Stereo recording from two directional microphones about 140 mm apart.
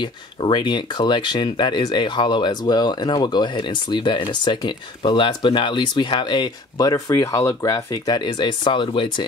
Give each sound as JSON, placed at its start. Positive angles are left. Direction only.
{"t": 0.0, "sound": "speech", "side_deg": 35}